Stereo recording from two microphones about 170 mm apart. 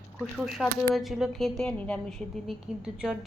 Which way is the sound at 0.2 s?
Centre (ahead or behind).